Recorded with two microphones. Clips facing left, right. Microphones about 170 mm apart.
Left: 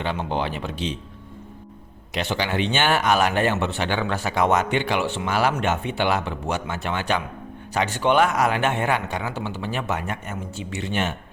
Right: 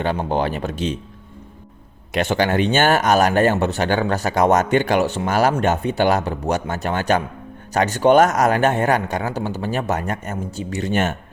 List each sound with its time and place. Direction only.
0.0 s speech: 45° right (ahead or behind)
2.1 s speech: 50° right (ahead or behind)